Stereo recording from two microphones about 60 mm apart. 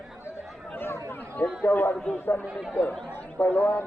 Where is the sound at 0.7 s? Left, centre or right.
Left.